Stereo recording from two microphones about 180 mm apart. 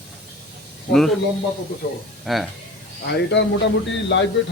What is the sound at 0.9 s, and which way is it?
Speech, centre (ahead or behind).